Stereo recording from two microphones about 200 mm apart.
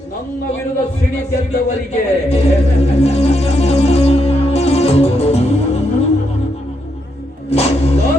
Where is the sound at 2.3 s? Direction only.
30° left (ahead or behind).